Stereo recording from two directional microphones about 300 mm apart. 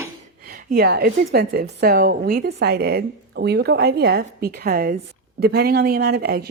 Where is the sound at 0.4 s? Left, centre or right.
Right.